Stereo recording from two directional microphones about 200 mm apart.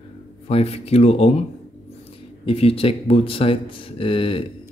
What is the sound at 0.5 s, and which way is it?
Speech, 30° left (ahead or behind).